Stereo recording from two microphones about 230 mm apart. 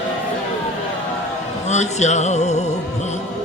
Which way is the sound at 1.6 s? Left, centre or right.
Left.